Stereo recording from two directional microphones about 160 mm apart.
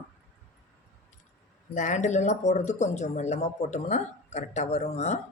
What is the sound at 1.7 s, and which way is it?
Speech, 50° left (ahead or behind).